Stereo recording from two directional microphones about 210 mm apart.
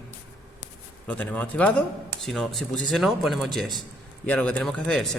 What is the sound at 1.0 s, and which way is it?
Speech, 5° left (ahead or behind).